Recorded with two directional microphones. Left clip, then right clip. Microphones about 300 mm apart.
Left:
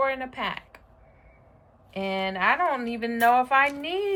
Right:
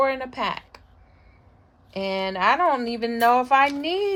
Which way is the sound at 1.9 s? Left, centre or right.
Centre.